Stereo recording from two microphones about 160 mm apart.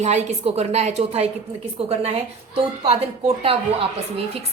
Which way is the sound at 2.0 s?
40° right (ahead or behind).